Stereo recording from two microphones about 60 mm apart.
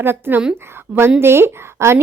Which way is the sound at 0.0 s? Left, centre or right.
Right.